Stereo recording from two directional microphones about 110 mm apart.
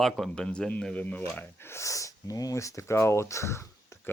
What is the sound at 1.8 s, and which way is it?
Speech, 30° left (ahead or behind).